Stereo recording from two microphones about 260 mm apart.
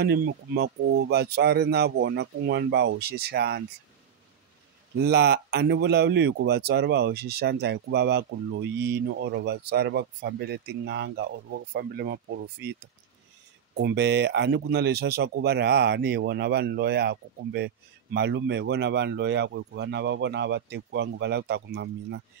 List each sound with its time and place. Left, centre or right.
0.0 s speech: right
5.0 s speech: right
13.7 s speech: right